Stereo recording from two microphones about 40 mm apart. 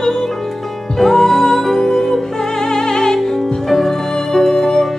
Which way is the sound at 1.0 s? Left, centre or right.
Centre.